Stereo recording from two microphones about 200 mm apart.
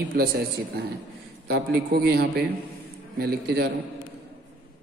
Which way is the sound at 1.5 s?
50° right (ahead or behind).